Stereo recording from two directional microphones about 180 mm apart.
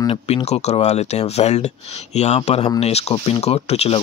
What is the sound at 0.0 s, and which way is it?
Speech, 30° left (ahead or behind).